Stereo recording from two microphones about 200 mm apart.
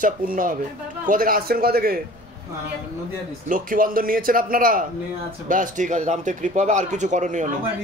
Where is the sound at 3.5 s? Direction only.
45° right (ahead or behind).